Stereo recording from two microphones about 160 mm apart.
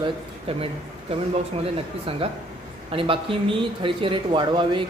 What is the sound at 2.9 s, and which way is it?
Speech, 35° right (ahead or behind).